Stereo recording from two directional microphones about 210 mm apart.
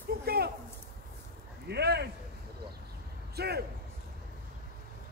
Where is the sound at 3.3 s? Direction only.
50° right (ahead or behind).